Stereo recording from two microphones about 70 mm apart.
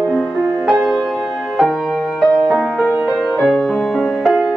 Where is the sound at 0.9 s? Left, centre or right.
Centre.